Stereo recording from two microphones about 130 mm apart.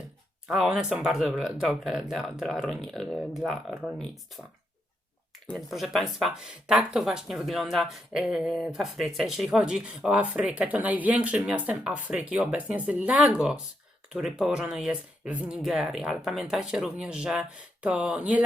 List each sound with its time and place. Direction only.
0.4 s speech: 5° right (ahead or behind)
5.5 s speech: centre (ahead or behind)